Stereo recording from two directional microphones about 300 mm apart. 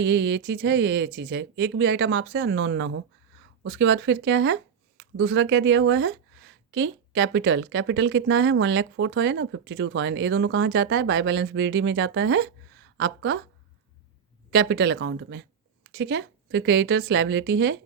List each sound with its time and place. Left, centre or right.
0.0 s speech: right
14.5 s speech: right